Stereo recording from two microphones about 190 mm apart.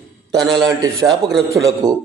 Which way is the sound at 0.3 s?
Centre (ahead or behind).